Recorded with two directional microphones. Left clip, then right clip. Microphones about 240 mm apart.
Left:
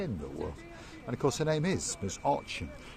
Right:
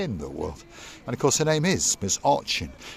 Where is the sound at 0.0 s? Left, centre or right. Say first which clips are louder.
Right 7 dB; right.